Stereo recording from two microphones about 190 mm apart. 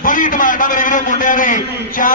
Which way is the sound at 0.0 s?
45° left (ahead or behind).